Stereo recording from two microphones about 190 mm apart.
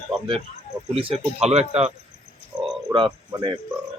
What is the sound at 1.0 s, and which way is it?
Speech, 30° right (ahead or behind).